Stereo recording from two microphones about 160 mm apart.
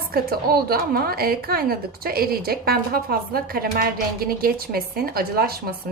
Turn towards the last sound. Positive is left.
turn(degrees=-75)  # may be behind; listen again after turning